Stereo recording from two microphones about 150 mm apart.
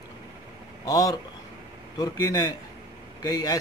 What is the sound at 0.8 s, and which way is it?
Speech, 25° left (ahead or behind).